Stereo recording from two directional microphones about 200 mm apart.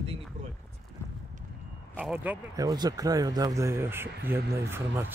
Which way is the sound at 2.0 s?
10° right (ahead or behind).